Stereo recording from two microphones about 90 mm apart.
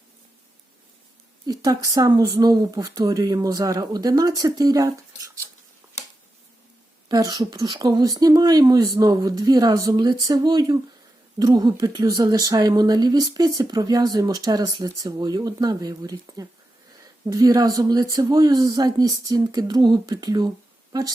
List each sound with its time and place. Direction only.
1.5 s speech: 45° right (ahead or behind)
7.1 s speech: 45° right (ahead or behind)